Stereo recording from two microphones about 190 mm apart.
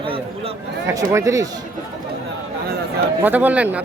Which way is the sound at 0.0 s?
30° right (ahead or behind).